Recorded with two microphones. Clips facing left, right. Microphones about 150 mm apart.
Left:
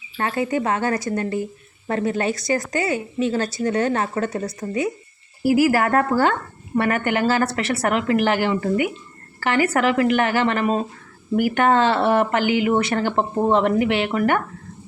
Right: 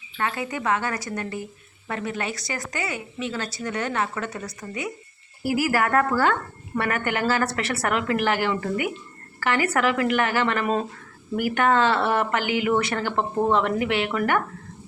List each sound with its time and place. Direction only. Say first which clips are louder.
0.2 s a woman's voice: left 6 dB; 35° left (ahead or behind)
5.4 s a woman's voice: left 6 dB; 25° left (ahead or behind)